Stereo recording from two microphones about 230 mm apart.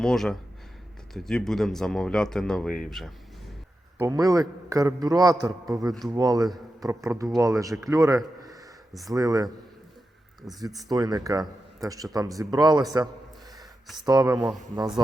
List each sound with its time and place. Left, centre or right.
0.0 s speech: centre
3.9 s a man's voice: centre
10.4 s speech: centre
10.8 s a man's voice: centre
14.3 s speech: centre